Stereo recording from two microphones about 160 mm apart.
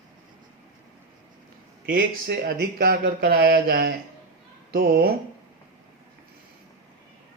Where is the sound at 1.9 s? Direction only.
70° right (ahead or behind).